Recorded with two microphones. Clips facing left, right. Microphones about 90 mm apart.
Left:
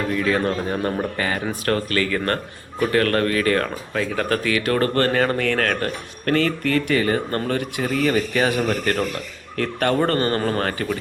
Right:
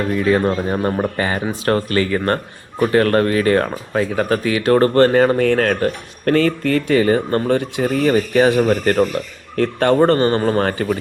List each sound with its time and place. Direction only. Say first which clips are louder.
0.1 s speech: right 6 dB; 20° right (ahead or behind)